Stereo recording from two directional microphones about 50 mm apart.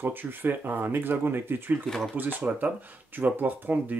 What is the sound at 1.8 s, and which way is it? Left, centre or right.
Speech, centre.